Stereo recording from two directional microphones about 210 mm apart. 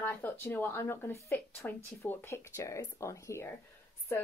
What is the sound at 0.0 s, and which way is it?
Speech, 10° left (ahead or behind).